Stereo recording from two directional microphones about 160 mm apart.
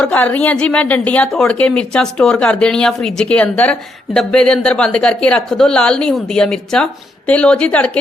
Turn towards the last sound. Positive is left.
turn(degrees=5)  # may be behind; listen again after turning